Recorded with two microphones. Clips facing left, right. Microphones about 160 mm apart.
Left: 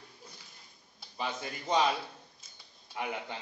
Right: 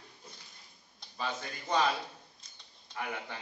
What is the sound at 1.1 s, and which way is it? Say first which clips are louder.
Speech: left 1 dB; 15° left (ahead or behind).